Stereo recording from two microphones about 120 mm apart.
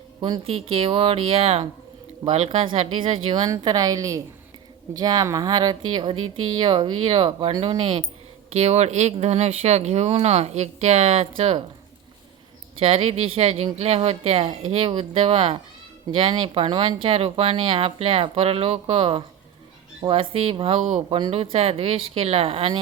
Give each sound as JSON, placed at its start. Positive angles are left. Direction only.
{"t": 0.2, "sound": "speech", "side_deg": -45}
{"t": 2.5, "sound": "a woman's voice", "side_deg": -50}
{"t": 8.5, "sound": "speech", "side_deg": -65}
{"t": 12.8, "sound": "speech", "side_deg": -55}